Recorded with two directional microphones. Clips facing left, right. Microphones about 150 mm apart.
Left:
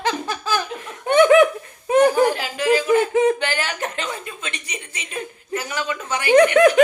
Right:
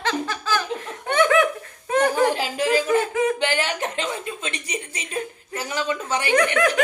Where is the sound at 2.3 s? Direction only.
30° right (ahead or behind).